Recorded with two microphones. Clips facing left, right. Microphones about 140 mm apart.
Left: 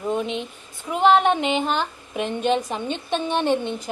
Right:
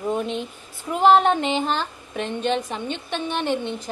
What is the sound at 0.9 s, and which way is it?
A woman's voice, centre (ahead or behind).